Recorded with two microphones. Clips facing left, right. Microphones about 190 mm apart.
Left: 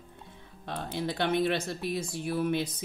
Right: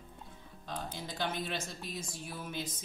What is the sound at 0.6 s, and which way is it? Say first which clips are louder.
Speech: left 8 dB; 65° left (ahead or behind).